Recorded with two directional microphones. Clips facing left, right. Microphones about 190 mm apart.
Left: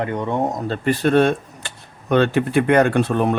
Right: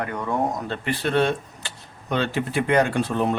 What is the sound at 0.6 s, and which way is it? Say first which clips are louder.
Speech: left 7 dB; 40° left (ahead or behind).